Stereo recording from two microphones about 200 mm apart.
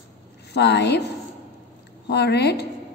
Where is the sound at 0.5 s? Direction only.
55° left (ahead or behind).